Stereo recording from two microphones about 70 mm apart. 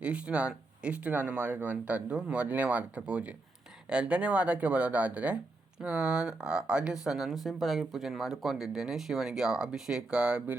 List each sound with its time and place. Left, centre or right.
0.0 s speech: centre